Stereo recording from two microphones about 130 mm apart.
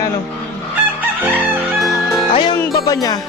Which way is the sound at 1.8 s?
Centre (ahead or behind).